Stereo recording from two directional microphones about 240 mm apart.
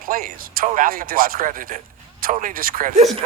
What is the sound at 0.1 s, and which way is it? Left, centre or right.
Speech, right.